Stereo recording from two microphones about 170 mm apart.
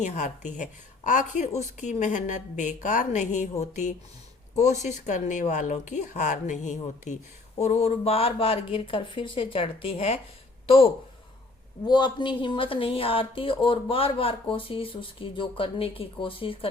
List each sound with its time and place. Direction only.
0.0 s a woman's voice: 45° left (ahead or behind)
11.9 s speech: 25° left (ahead or behind)